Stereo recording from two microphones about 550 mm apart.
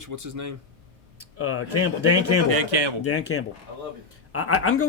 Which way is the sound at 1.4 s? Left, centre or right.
Left.